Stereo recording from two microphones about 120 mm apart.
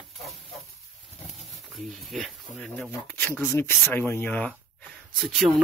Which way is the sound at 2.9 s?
15° left (ahead or behind).